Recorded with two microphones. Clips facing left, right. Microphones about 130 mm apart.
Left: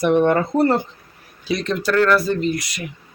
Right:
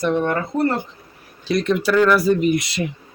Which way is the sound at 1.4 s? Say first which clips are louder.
Right 3 dB; centre (ahead or behind).